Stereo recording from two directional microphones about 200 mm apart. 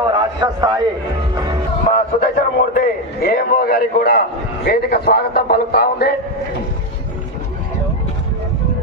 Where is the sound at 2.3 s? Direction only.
45° left (ahead or behind).